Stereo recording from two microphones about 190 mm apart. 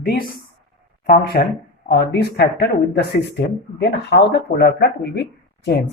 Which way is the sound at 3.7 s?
60° left (ahead or behind).